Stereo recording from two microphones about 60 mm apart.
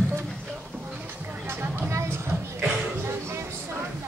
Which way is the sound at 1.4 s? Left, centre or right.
Right.